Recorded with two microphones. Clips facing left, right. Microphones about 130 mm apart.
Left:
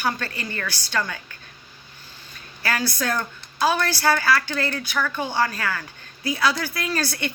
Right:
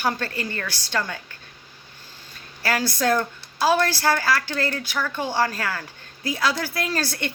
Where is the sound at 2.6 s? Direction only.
30° right (ahead or behind).